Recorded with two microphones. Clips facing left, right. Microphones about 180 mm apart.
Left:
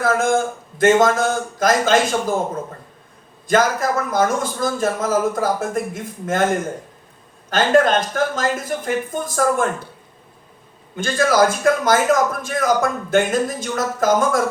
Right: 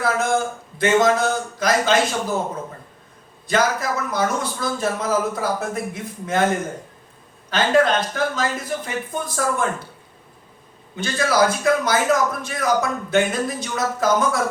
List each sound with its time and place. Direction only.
0.0 s a man's voice: 50° left (ahead or behind)
3.4 s a man's voice: 50° left (ahead or behind)
7.5 s a man's voice: 50° left (ahead or behind)
10.9 s a man's voice: 50° left (ahead or behind)